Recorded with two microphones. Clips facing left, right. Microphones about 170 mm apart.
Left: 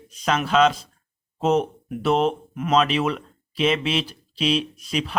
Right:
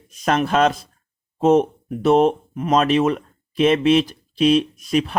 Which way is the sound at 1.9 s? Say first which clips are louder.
Right 5 dB; 40° right (ahead or behind).